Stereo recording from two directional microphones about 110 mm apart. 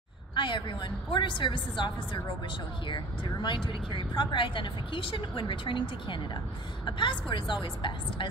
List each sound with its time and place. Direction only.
0.3 s speech: 45° left (ahead or behind)